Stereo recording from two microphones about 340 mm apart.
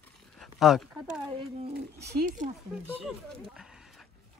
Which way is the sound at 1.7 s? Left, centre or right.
Right.